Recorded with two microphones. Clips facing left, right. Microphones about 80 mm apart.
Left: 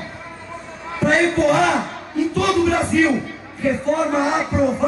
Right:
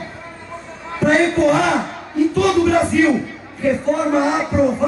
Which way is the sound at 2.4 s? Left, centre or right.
Centre.